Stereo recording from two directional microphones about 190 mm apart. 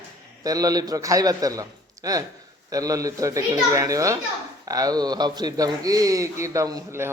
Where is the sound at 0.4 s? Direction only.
20° right (ahead or behind).